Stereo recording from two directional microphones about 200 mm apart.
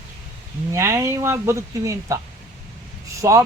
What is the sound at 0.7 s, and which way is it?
A man's voice, 15° right (ahead or behind).